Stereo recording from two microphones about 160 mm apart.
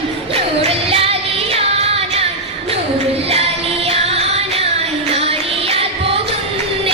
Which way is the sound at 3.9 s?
40° right (ahead or behind).